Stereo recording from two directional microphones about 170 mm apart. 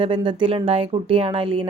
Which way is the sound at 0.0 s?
30° right (ahead or behind).